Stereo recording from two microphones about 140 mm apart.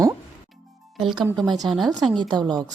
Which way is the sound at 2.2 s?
30° right (ahead or behind).